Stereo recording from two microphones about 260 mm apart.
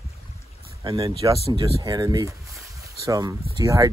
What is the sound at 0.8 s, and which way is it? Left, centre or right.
Speech, centre.